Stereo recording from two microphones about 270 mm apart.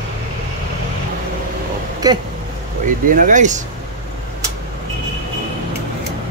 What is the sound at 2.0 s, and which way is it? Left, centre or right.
Speech, centre.